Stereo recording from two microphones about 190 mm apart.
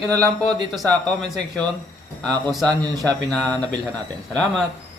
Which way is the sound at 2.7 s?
20° right (ahead or behind).